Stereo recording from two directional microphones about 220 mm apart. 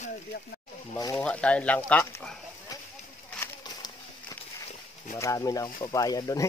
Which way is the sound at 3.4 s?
15° left (ahead or behind).